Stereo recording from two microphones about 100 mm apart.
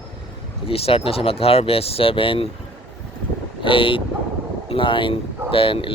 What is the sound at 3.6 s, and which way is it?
Speech, 60° left (ahead or behind).